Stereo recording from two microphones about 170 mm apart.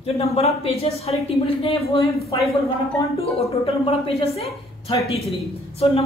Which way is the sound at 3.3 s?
35° left (ahead or behind).